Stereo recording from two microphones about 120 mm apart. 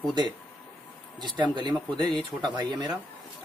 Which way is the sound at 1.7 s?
5° left (ahead or behind).